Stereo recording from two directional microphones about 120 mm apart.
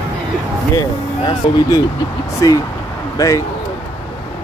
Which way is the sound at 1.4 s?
50° left (ahead or behind).